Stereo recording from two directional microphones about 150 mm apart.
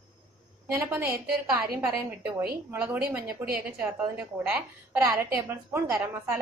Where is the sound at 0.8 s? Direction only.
15° right (ahead or behind).